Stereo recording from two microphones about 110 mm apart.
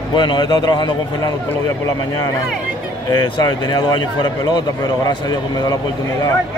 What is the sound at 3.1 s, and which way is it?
Speech, 40° left (ahead or behind).